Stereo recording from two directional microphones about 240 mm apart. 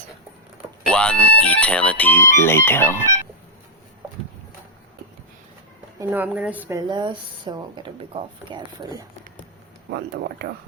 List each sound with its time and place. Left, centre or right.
0.9 s speech: centre
6.0 s speech: centre